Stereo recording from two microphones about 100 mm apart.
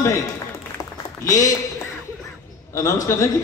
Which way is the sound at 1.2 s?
35° left (ahead or behind).